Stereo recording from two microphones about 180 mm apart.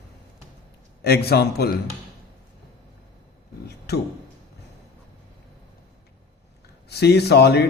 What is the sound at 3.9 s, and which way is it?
Speech, 65° left (ahead or behind).